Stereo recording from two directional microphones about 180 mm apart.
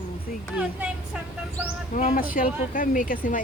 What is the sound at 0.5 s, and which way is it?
Speech, 5° right (ahead or behind).